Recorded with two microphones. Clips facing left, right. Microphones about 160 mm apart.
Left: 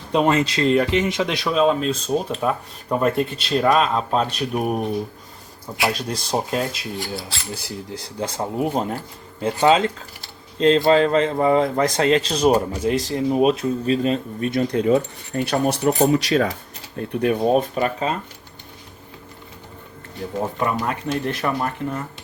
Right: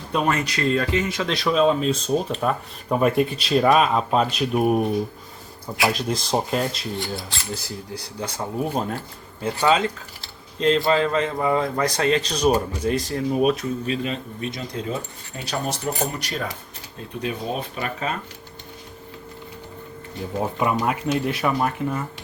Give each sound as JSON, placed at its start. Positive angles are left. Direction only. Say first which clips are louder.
{"t": 0.1, "sound": "speech", "louder": "left 5 dB", "side_deg": 25}
{"t": 1.5, "sound": "speech", "louder": "left 1 dB", "side_deg": 0}
{"t": 7.9, "sound": "speech", "louder": "left 4 dB", "side_deg": 25}
{"t": 14.5, "sound": "speech", "louder": "left 14 dB", "side_deg": 65}
{"t": 17.0, "sound": "speech", "louder": "left 9 dB", "side_deg": 60}
{"t": 20.6, "sound": "speech", "louder": "right 2 dB", "side_deg": -10}